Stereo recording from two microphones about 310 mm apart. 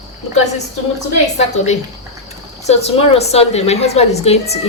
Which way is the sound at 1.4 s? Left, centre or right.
Left.